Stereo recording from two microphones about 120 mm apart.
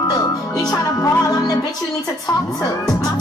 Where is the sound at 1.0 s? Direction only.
30° left (ahead or behind).